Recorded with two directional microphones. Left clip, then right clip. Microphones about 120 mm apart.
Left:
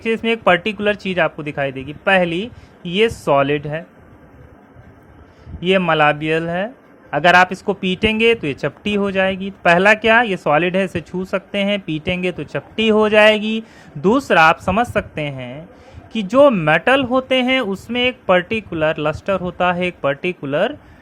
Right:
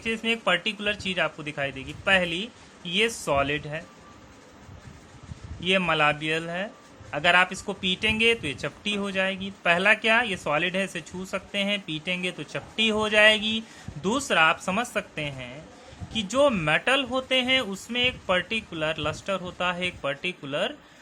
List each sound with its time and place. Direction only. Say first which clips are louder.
0.0 s speech: left 9 dB; 50° left (ahead or behind)
5.5 s speech: left 8 dB; 45° left (ahead or behind)